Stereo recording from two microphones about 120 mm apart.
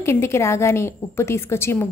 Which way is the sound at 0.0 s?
20° left (ahead or behind).